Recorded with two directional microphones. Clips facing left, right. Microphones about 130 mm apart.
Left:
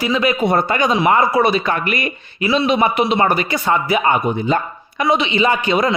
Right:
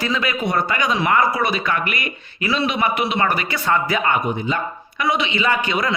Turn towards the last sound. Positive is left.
turn(degrees=25)  # may be behind; listen again after turning